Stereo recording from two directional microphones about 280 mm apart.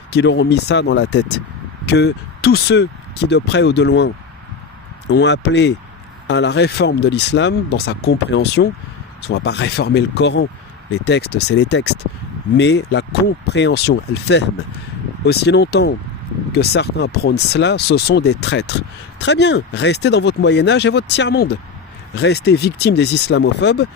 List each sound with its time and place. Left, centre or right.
0.1 s speech: left